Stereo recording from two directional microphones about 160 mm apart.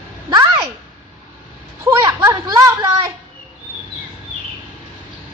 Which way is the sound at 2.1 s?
15° right (ahead or behind).